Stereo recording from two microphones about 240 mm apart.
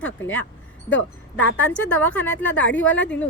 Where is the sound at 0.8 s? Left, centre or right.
Left.